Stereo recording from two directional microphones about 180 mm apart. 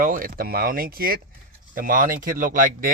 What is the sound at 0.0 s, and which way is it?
Speech, 50° right (ahead or behind).